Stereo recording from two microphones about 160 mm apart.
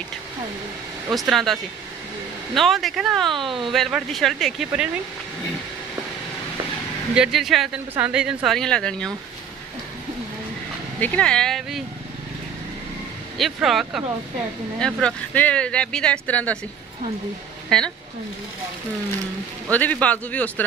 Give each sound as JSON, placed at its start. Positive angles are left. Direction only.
{"t": 1.1, "sound": "speech", "side_deg": 0}
{"t": 3.4, "sound": "speech", "side_deg": -30}
{"t": 3.7, "sound": "speech", "side_deg": 0}
{"t": 7.2, "sound": "speech", "side_deg": 0}
{"t": 11.0, "sound": "speech", "side_deg": 10}
{"t": 13.4, "sound": "speech", "side_deg": 0}
{"t": 17.6, "sound": "speech", "side_deg": 5}
{"t": 19.7, "sound": "a man's voice", "side_deg": 10}